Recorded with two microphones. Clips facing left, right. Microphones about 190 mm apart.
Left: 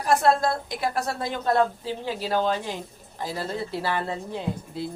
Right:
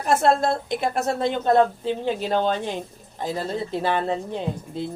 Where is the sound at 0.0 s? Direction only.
25° right (ahead or behind).